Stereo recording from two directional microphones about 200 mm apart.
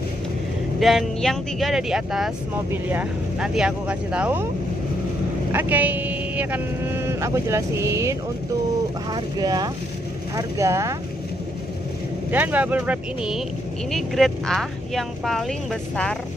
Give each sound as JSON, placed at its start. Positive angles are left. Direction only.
{"t": 0.7, "sound": "speech", "side_deg": 0}
{"t": 5.5, "sound": "speech", "side_deg": -10}
{"t": 12.3, "sound": "speech", "side_deg": -10}